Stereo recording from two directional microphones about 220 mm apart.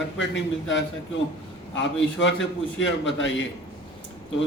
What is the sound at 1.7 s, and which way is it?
A man's voice, 55° left (ahead or behind).